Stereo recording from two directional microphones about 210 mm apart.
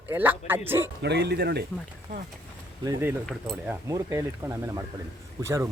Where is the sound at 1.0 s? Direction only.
50° right (ahead or behind).